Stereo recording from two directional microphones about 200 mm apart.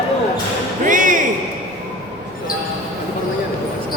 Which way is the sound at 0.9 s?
40° right (ahead or behind).